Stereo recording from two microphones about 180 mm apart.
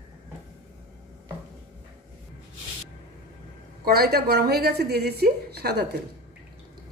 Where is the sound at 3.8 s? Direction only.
60° right (ahead or behind).